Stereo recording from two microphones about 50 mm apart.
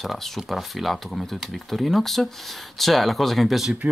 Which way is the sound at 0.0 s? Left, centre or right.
Centre.